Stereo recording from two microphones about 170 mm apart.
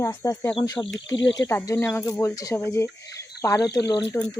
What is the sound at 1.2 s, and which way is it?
Speech, 90° left.